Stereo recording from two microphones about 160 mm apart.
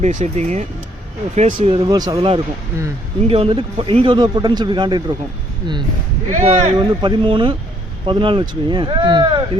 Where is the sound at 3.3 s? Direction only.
35° right (ahead or behind).